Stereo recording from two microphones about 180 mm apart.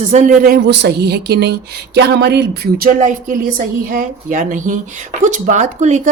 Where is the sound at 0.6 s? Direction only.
70° right (ahead or behind).